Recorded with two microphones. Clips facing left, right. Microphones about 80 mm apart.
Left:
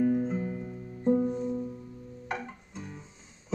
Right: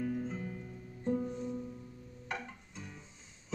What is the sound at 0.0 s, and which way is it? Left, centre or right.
Music, left.